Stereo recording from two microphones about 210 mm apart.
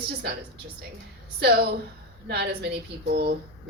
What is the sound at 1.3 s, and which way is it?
Speech, 50° right (ahead or behind).